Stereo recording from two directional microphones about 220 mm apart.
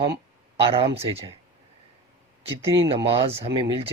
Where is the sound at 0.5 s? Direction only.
25° right (ahead or behind).